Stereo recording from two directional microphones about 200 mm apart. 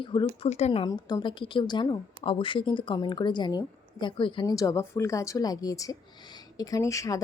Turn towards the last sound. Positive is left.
turn(degrees=15)  # may be behind; listen again after turning